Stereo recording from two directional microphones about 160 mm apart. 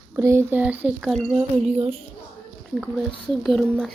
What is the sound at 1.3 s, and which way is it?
Speech, 40° right (ahead or behind).